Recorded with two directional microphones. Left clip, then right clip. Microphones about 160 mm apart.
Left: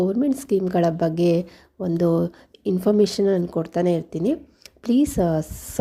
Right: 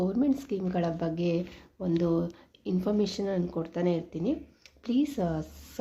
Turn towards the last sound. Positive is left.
turn(degrees=40)  # may be behind; listen again after turning